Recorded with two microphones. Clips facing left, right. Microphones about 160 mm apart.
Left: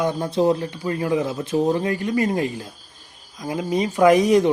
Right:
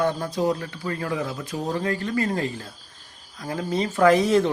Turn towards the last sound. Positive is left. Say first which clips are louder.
# left 3 dB
turn(degrees=15)  # may be behind; listen again after turning